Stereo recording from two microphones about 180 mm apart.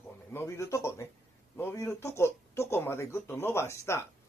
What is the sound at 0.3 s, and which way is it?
Speech, 15° left (ahead or behind).